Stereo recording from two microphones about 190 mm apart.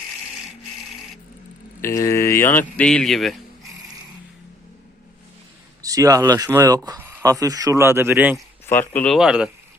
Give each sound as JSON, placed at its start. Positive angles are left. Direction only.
{"t": 1.8, "sound": "speech", "side_deg": 15}
{"t": 5.8, "sound": "speech", "side_deg": -20}
{"t": 8.6, "sound": "speech", "side_deg": 10}
{"t": 9.1, "sound": "speech", "side_deg": -5}